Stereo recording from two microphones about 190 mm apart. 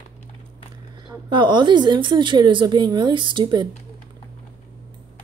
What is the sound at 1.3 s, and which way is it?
A woman's voice, 25° right (ahead or behind).